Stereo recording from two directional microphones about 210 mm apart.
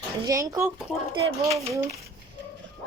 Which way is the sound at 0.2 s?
15° right (ahead or behind).